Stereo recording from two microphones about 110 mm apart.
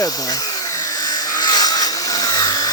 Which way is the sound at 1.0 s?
35° left (ahead or behind).